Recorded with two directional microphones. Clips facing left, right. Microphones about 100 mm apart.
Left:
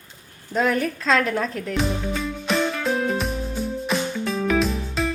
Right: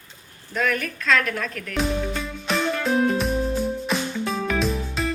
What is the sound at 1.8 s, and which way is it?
Music, centre (ahead or behind).